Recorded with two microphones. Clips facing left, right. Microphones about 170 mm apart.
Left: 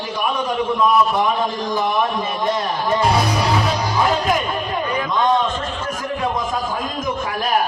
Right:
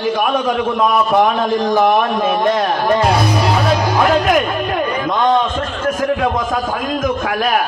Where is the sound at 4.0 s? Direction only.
80° right.